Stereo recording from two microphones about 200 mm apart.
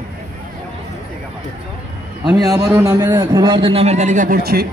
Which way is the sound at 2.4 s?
20° right (ahead or behind).